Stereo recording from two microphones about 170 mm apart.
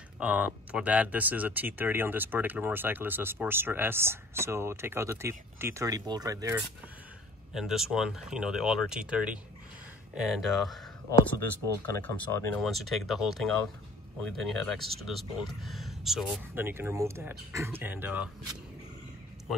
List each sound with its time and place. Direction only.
0.2 s speech: 10° right (ahead or behind)
7.5 s speech: centre (ahead or behind)
11.1 s speech: 15° left (ahead or behind)
12.5 s speech: centre (ahead or behind)
16.5 s speech: 15° right (ahead or behind)